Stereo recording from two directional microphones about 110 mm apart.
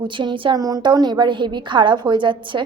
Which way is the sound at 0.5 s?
35° right (ahead or behind).